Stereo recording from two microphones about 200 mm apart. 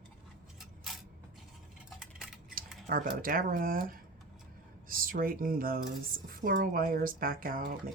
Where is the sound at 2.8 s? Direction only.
45° right (ahead or behind).